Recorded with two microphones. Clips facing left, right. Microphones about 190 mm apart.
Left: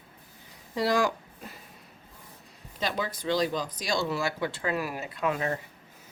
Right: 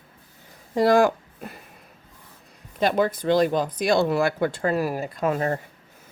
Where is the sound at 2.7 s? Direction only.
55° right (ahead or behind).